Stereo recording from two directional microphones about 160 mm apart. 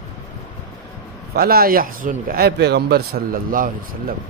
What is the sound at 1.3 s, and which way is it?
Speech, 70° right (ahead or behind).